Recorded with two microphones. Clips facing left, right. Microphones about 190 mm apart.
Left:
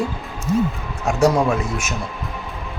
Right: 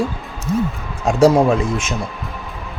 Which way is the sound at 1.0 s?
30° right (ahead or behind).